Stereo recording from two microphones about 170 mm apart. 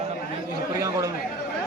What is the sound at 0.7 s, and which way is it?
Speech, 20° right (ahead or behind).